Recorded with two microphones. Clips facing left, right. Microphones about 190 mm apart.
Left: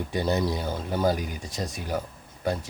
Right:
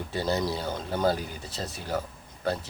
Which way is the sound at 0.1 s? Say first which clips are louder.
Left 2 dB; 15° left (ahead or behind).